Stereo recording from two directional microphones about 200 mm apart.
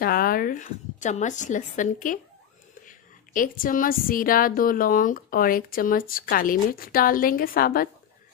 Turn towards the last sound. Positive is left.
turn(degrees=45)  # may be behind; listen again after turning